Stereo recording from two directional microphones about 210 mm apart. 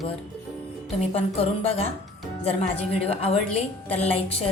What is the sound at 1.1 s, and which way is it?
A woman's voice, 30° left (ahead or behind).